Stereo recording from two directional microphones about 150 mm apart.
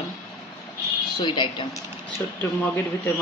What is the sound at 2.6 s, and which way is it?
Speech, 15° left (ahead or behind).